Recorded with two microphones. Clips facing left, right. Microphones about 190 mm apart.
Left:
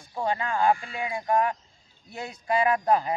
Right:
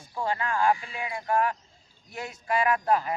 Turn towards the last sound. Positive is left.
turn(degrees=20)  # may be behind; listen again after turning